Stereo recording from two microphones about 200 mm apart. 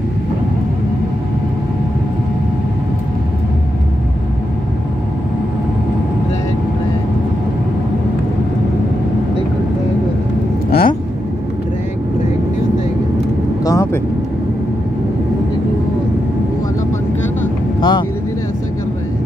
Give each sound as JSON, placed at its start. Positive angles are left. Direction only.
{"t": 10.7, "sound": "vehicle", "side_deg": 50}
{"t": 13.7, "sound": "vehicle", "side_deg": 15}
{"t": 17.7, "sound": "vehicle", "side_deg": 20}